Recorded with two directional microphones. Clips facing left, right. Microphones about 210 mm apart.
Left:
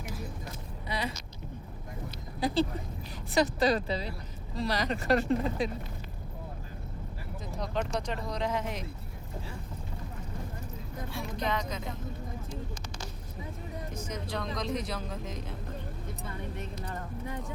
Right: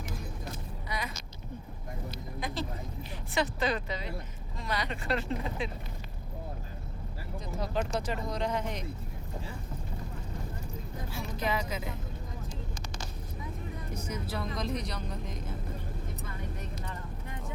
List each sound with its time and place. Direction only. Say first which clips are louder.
0.9 s vehicle: left 4 dB; 30° left (ahead or behind)
2.4 s a sound: left 8 dB; 35° left (ahead or behind)
3.3 s speech: left 5 dB; 35° left (ahead or behind)
7.5 s speech: even; 5° right (ahead or behind)
11.1 s speech: even; 5° right (ahead or behind)
13.9 s speech: right 1 dB; 10° right (ahead or behind)